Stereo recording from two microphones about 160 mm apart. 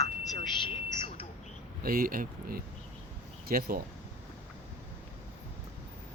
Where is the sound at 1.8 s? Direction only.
60° right (ahead or behind).